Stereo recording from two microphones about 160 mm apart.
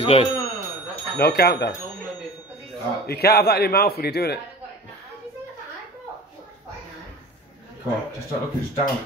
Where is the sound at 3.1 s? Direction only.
80° left.